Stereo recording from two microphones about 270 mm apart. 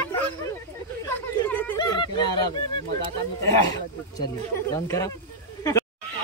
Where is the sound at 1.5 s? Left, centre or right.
Centre.